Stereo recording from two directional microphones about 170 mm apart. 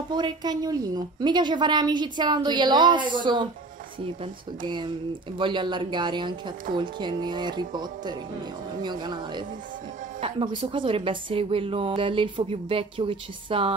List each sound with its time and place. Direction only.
0.1 s a woman's voice: 25° right (ahead or behind)